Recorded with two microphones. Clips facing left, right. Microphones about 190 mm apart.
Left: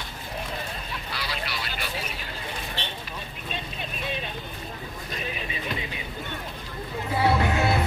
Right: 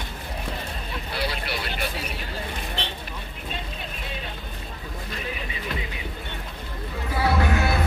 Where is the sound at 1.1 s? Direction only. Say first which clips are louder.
Right 5 dB; 55° right (ahead or behind).